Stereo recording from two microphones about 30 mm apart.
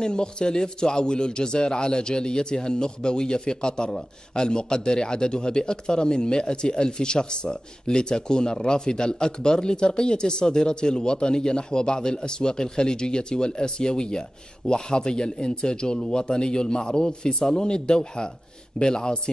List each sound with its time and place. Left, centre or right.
0.0 s a man's voice: left